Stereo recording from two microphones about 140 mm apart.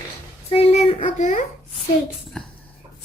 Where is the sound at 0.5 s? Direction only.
45° left (ahead or behind).